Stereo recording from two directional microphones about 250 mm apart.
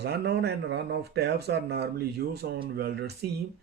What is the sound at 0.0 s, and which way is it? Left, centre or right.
Speech, right.